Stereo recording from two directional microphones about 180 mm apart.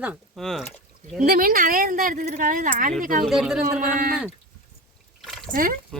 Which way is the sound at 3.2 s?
Centre (ahead or behind).